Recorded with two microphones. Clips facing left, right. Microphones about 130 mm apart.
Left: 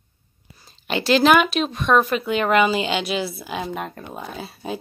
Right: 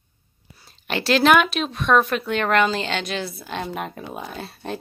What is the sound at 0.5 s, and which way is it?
A woman's voice, centre (ahead or behind).